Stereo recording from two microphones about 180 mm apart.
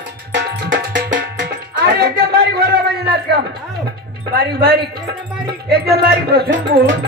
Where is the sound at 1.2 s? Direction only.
75° right (ahead or behind); by 2.6 s 60° right (ahead or behind).